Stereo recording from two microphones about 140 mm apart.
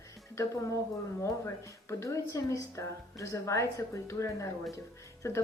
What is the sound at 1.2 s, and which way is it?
Speech, 20° left (ahead or behind).